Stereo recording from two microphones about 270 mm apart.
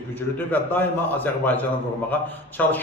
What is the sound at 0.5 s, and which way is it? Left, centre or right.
Speech, centre.